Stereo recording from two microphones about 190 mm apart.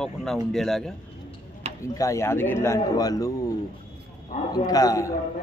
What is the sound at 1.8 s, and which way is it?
A man's voice, 15° left (ahead or behind).